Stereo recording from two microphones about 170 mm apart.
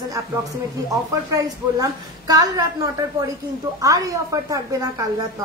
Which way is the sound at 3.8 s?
20° right (ahead or behind).